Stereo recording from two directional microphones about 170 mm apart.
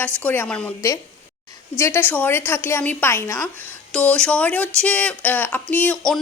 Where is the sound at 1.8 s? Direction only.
15° left (ahead or behind).